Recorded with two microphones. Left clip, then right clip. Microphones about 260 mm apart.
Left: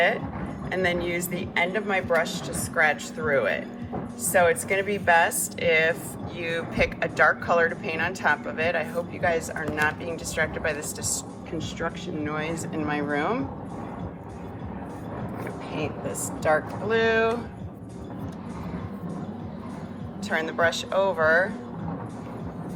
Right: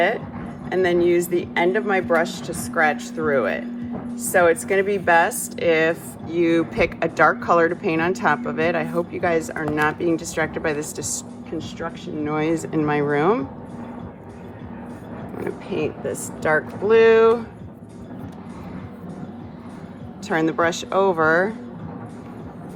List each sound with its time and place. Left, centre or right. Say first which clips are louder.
0.7 s speech: right 8 dB; right
11.5 s speech: right 1 dB; centre; by 13.4 s right
16.4 s speech: right 3 dB; right
20.2 s speech: right 4 dB; right